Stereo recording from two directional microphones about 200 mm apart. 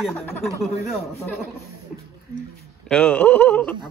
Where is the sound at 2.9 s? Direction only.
5° left (ahead or behind).